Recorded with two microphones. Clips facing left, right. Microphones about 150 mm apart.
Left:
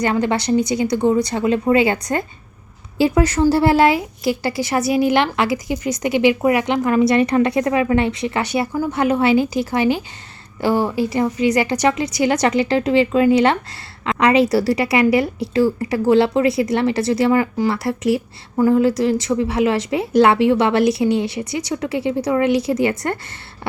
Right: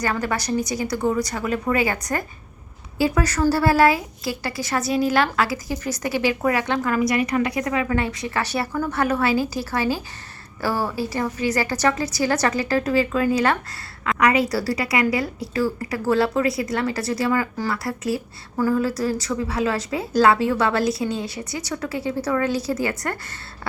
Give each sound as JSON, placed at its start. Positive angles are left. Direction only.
{"t": 0.0, "sound": "a woman's voice", "side_deg": 25}